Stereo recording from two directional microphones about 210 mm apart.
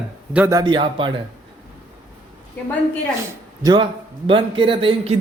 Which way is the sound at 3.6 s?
20° right (ahead or behind).